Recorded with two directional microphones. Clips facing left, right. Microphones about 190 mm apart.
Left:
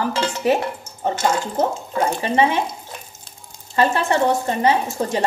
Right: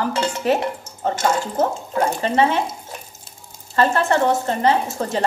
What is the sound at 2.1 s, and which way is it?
Speech, 15° left (ahead or behind).